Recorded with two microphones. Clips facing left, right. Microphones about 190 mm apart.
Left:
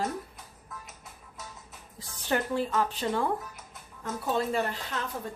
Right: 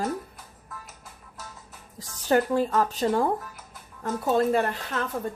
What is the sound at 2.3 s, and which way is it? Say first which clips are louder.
A woman's voice: right 6 dB; 45° right (ahead or behind).